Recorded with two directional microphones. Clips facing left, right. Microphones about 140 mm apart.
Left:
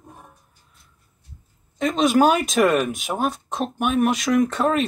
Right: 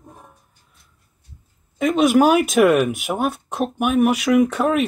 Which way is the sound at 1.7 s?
5° right (ahead or behind).